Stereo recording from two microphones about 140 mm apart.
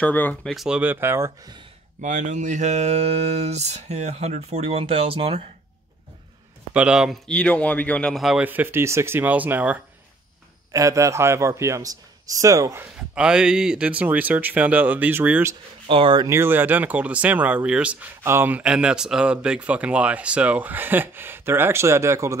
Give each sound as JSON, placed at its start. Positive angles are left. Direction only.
{"t": 0.0, "sound": "a man's voice", "side_deg": 10}
{"t": 2.0, "sound": "mantra", "side_deg": -65}
{"t": 6.7, "sound": "a man's voice", "side_deg": -10}
{"t": 7.2, "sound": "a man's voice", "side_deg": 10}
{"t": 10.7, "sound": "a man's voice", "side_deg": -25}
{"t": 15.9, "sound": "speech", "side_deg": -35}
{"t": 16.3, "sound": "a man's voice", "side_deg": -15}